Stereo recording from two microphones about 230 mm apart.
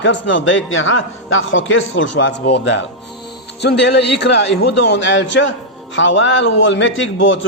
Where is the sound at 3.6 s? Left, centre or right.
Left.